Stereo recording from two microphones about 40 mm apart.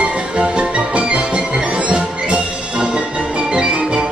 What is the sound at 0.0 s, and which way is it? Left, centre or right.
Music, right.